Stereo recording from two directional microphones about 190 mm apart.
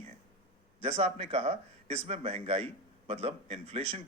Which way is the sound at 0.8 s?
30° right (ahead or behind).